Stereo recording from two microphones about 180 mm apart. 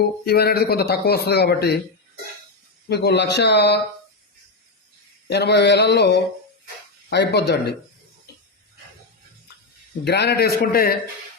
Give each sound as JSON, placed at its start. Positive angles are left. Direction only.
{"t": 0.3, "sound": "speech", "side_deg": 60}
{"t": 2.9, "sound": "speech", "side_deg": 65}
{"t": 5.3, "sound": "speech", "side_deg": 70}
{"t": 10.0, "sound": "speech", "side_deg": 65}